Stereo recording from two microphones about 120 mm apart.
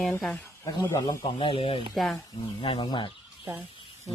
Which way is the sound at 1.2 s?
50° left (ahead or behind).